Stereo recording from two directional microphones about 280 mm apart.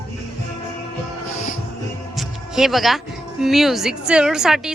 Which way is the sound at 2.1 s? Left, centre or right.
Centre.